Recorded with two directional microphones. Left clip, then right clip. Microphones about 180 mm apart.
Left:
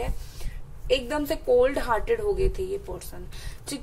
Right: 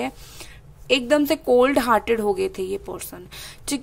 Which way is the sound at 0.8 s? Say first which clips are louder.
Right 7 dB; 40° right (ahead or behind).